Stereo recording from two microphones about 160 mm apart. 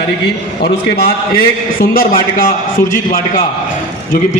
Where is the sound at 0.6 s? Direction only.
75° left (ahead or behind).